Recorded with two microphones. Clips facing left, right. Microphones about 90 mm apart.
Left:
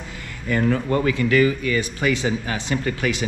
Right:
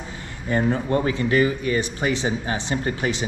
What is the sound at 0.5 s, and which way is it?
Speech, 25° right (ahead or behind).